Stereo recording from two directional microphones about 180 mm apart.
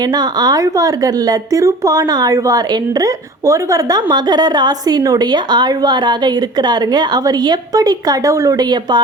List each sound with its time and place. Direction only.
0.1 s a woman's voice: 25° right (ahead or behind)